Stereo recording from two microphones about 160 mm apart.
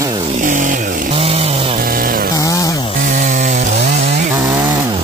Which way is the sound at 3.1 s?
50° right (ahead or behind).